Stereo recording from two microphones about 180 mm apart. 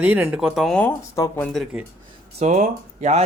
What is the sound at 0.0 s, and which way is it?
Speech, 10° right (ahead or behind).